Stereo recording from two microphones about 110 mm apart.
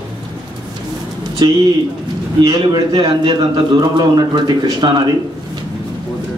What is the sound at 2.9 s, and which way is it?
Speech, 45° right (ahead or behind).